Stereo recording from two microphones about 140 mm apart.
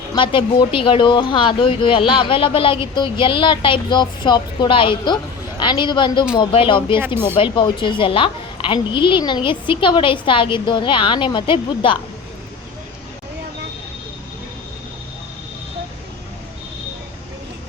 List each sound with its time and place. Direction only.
0.2 s speech: 40° left (ahead or behind)